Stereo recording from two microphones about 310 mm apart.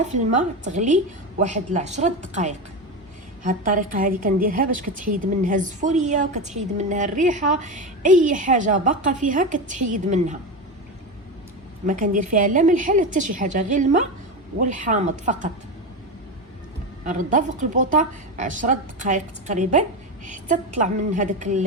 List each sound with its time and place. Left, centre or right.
0.0 s a woman's voice: right
11.9 s a woman's voice: right
17.1 s a woman's voice: right